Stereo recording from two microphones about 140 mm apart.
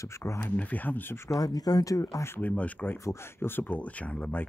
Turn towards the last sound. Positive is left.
turn(degrees=10)  # may be behind; listen again after turning